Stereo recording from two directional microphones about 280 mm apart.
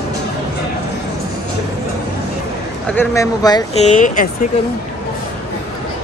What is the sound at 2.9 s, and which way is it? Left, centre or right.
Speech, centre.